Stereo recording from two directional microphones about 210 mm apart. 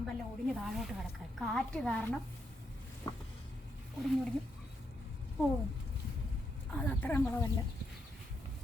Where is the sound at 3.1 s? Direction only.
15° left (ahead or behind).